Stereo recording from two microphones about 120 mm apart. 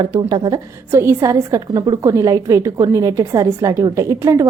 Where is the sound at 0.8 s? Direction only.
20° right (ahead or behind).